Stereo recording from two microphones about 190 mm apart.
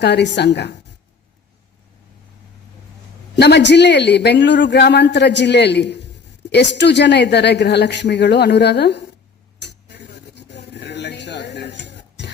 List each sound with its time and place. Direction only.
0.0 s a man's voice: 65° left (ahead or behind)
3.3 s a man's voice: 60° left (ahead or behind)
9.6 s a sound: 65° left (ahead or behind)